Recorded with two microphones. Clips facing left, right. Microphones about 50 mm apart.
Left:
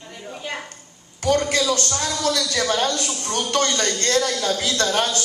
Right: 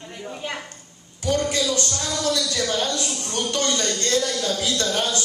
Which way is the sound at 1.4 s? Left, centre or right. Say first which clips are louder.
Left 2 dB; left.